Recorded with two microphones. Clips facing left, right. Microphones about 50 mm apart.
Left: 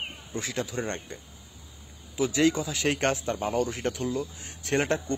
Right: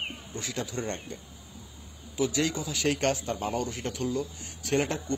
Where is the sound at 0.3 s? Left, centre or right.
Left.